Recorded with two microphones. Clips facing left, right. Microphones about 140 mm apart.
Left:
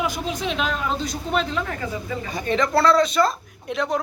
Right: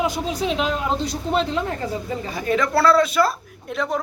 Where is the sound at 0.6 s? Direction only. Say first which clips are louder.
Right 2 dB; 20° right (ahead or behind).